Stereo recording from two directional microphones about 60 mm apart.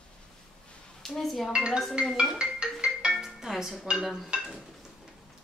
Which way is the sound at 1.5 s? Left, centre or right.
Centre.